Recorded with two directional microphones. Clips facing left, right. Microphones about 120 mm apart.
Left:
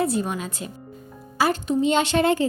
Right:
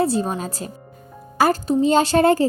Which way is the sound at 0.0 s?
30° right (ahead or behind).